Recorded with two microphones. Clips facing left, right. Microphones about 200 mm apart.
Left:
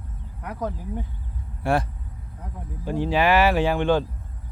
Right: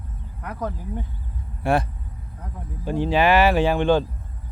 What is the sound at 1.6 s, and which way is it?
Speech, 20° right (ahead or behind).